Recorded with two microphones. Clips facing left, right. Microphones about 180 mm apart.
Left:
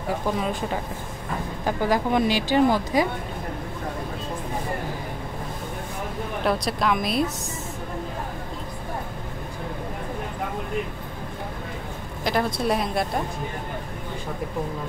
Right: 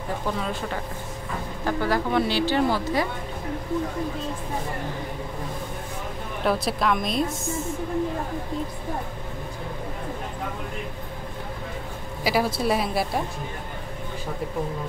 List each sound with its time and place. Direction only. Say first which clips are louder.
0.4 s a woman's voice: left 3 dB; 15° left (ahead or behind)
1.7 s a woman's voice: left 2 dB; 15° left (ahead or behind)
6.4 s a woman's voice: right 1 dB; centre (ahead or behind)
12.2 s a woman's voice: right 1 dB; 5° right (ahead or behind)